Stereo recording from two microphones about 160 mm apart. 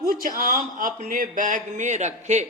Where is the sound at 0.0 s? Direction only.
65° right (ahead or behind); by 2.5 s 45° right (ahead or behind).